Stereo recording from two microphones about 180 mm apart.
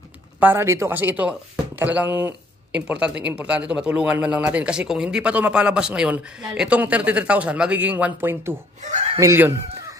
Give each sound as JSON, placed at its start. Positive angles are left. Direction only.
{"t": 0.4, "sound": "speech", "side_deg": -10}
{"t": 8.8, "sound": "speech", "side_deg": -40}
{"t": 9.2, "sound": "speech", "side_deg": -15}